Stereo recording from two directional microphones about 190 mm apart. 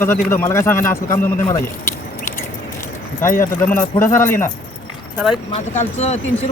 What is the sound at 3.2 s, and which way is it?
Speech, 15° left (ahead or behind).